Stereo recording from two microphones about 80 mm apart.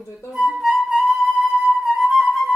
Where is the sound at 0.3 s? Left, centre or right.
Centre.